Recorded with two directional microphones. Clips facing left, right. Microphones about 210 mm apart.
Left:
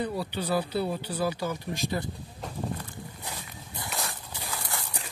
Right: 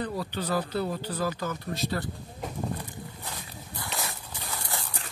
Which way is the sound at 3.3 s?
20° left (ahead or behind).